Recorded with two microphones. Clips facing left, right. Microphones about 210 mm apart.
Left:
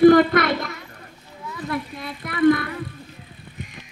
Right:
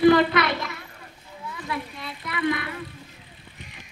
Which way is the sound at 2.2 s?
50° left (ahead or behind).